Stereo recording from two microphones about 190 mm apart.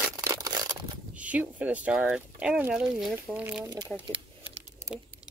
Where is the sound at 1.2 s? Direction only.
10° right (ahead or behind).